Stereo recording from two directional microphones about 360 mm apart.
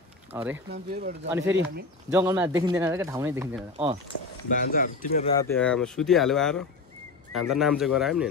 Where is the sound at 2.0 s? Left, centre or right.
Centre.